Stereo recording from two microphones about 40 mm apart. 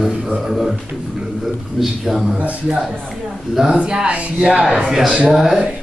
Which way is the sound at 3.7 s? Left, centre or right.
Right.